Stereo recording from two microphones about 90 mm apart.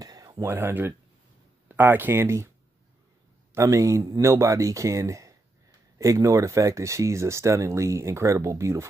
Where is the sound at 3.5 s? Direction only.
35° right (ahead or behind).